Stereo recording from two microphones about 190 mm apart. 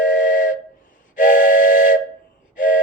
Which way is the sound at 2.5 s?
45° left (ahead or behind).